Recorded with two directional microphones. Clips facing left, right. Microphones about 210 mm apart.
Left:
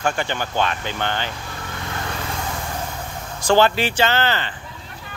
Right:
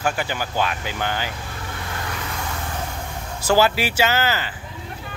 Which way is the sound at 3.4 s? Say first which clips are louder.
Left 2 dB; 5° right (ahead or behind).